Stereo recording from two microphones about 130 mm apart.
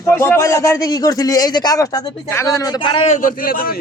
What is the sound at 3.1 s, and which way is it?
Speech, 90° left.